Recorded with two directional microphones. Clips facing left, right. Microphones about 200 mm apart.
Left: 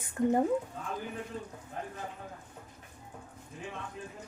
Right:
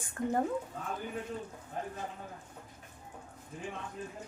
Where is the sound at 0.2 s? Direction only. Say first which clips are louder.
Left 6 dB; 20° left (ahead or behind).